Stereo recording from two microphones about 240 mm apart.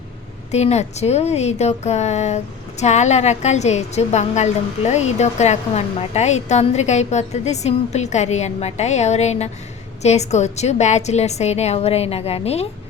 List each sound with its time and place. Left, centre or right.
0.5 s speech: left